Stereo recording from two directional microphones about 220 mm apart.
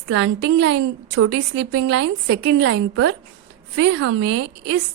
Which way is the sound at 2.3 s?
50° right (ahead or behind).